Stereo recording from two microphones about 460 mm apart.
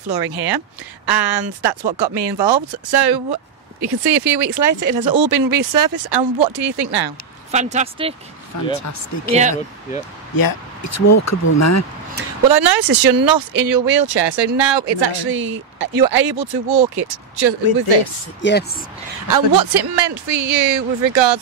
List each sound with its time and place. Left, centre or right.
0.1 s speech: right
4.6 s speech: right
6.5 s speech: right
7.5 s speech: centre
8.8 s speech: left
9.3 s speech: centre
10.3 s speech: left
12.4 s speech: right
18.4 s speech: left
19.2 s speech: right